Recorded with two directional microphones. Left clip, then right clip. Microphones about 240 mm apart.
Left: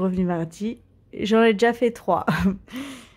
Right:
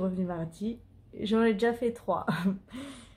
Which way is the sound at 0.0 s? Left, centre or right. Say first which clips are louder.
Left 8 dB; left.